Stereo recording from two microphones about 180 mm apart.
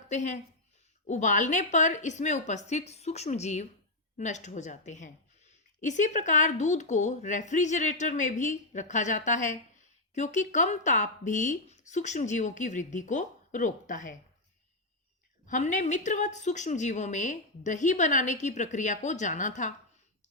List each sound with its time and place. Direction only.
0.1 s a woman's voice: 40° left (ahead or behind)
15.4 s a woman's voice: 45° left (ahead or behind)